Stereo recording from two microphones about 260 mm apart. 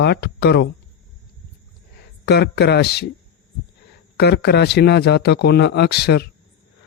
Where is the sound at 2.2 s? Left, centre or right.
Left.